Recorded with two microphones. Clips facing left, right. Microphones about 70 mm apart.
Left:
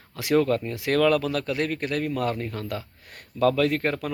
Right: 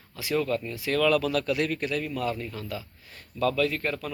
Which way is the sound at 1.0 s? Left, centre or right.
Left.